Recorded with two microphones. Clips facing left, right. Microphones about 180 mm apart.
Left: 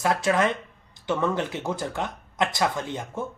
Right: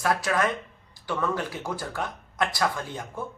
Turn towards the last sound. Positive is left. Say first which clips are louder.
# left 3 dB
turn(degrees=20)  # may be behind; listen again after turning